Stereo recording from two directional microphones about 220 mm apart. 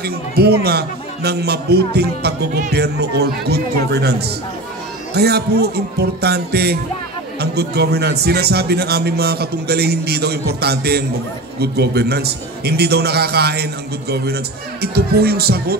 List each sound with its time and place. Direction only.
0.0 s a man's voice: 45° right (ahead or behind)